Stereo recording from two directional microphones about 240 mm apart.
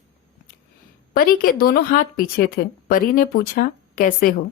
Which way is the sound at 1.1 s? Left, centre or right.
Left.